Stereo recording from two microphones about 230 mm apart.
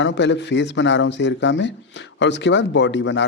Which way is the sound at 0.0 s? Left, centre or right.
Left.